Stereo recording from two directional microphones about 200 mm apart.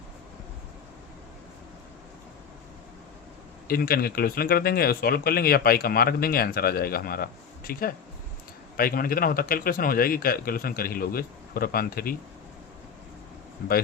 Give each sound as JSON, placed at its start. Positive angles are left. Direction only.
{"t": 3.7, "sound": "speech", "side_deg": 50}